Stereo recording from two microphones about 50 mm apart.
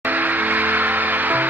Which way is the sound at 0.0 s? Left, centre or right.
Right.